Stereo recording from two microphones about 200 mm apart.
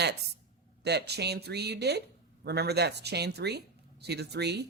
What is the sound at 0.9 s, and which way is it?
Speech, 55° right (ahead or behind).